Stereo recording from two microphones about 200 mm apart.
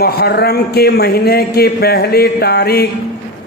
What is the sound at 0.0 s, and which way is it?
A man's voice, 50° left (ahead or behind).